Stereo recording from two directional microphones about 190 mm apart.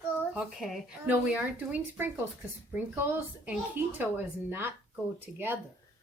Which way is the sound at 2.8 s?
10° right (ahead or behind).